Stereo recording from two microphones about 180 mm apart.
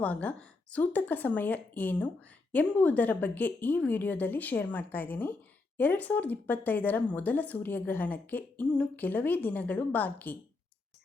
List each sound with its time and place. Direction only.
0.0 s a woman's voice: 10° left (ahead or behind)